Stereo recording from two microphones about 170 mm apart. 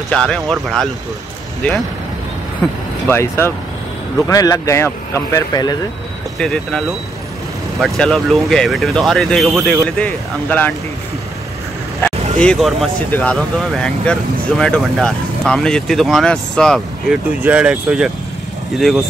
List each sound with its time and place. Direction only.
0.1 s speech: 5° left (ahead or behind); by 5.8 s 20° left (ahead or behind)
6.3 s speech: 5° left (ahead or behind)
7.8 s speech: centre (ahead or behind)
12.0 s speech: 5° left (ahead or behind)